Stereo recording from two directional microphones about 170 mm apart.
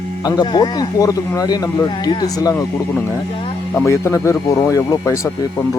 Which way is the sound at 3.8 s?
15° left (ahead or behind).